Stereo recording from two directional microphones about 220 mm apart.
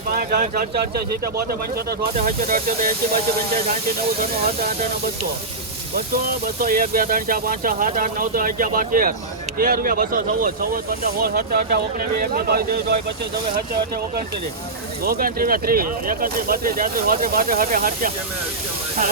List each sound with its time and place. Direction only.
0.1 s speech: 40° right (ahead or behind)
6.6 s speech: 40° right (ahead or behind)
15.0 s speech: 40° right (ahead or behind)